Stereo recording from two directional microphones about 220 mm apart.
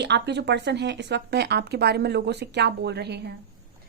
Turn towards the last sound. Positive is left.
turn(degrees=-50)  # may be behind; listen again after turning